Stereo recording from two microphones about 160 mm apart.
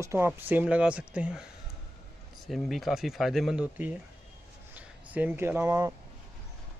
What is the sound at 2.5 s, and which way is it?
Speech, centre (ahead or behind).